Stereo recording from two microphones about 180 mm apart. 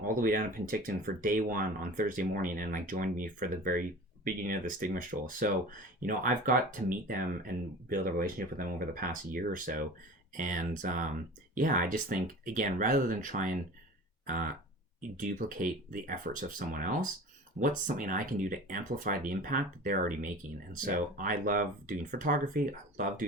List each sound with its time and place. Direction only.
0.1 s speech: 50° right (ahead or behind)